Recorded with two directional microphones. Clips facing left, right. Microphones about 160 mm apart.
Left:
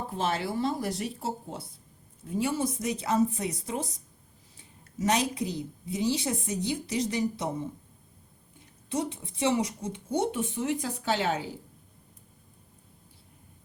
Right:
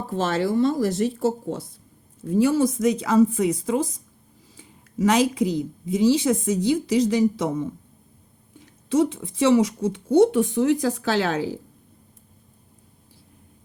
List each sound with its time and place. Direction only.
0.2 s a woman's voice: 90° right